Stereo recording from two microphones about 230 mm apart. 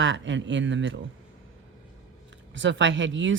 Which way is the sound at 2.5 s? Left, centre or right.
Right.